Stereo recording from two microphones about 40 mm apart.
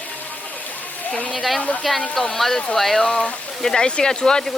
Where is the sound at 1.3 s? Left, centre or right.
Centre.